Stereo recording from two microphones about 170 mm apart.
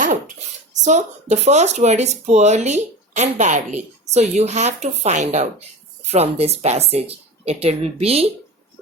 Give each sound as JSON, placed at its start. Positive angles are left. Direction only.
{"t": 0.9, "sound": "speech", "side_deg": -40}